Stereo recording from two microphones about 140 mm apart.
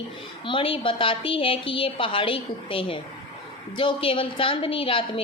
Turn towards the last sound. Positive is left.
turn(degrees=40)  # may be behind; listen again after turning